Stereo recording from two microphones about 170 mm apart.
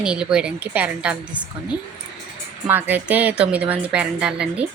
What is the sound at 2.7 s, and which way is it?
A woman's voice, 10° right (ahead or behind).